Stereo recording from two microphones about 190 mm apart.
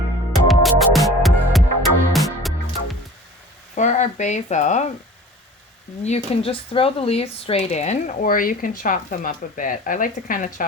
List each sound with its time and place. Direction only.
0.4 s music: centre (ahead or behind)
3.8 s speech: 40° left (ahead or behind)
6.0 s speech: 35° left (ahead or behind)